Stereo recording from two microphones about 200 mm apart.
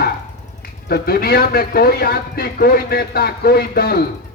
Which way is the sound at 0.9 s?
50° left (ahead or behind).